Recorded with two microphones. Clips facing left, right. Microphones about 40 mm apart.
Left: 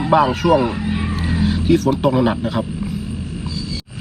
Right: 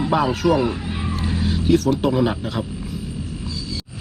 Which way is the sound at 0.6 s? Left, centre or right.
Left.